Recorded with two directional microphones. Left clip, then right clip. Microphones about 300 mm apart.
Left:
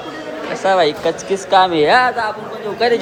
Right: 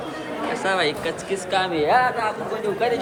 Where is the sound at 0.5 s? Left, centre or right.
Centre; by 3.0 s left.